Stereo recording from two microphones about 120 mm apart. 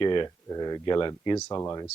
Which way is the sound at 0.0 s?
40° left (ahead or behind).